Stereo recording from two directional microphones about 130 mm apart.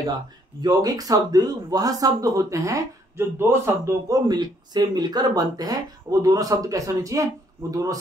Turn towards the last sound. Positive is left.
turn(degrees=-25)  # may be behind; listen again after turning